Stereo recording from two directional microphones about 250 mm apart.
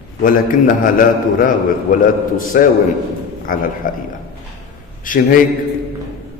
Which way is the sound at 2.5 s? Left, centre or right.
Left.